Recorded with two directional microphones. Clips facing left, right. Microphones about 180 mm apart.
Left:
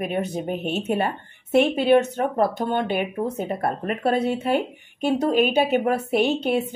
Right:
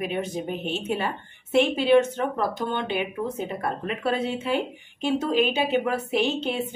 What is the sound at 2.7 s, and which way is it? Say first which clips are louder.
Speech: left 4 dB; 50° left (ahead or behind).